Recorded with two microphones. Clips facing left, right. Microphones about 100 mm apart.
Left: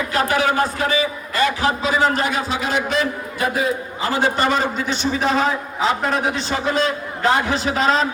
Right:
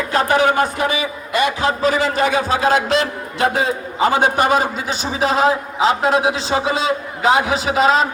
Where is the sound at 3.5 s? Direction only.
25° right (ahead or behind); by 5.8 s 5° right (ahead or behind).